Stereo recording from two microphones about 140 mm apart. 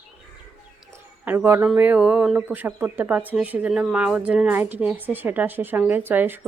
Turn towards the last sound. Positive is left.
turn(degrees=-15)  # may be behind; listen again after turning